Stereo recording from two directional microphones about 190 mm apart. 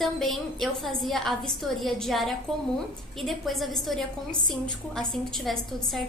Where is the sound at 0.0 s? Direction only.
Centre (ahead or behind).